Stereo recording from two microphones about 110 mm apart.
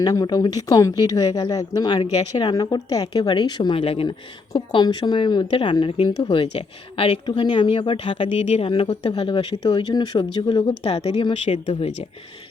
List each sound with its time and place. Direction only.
0.0 s a woman's voice: 35° left (ahead or behind)
3.1 s a woman's voice: 50° left (ahead or behind)
4.5 s a woman's voice: 45° left (ahead or behind)
8.3 s speech: 75° left (ahead or behind); by 9.9 s 55° left (ahead or behind)
9.9 s a woman's voice: 45° left (ahead or behind)
10.8 s speech: 65° left (ahead or behind)